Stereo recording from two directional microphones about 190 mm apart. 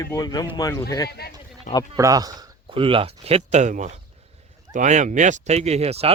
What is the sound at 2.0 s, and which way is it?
Speech, 20° right (ahead or behind).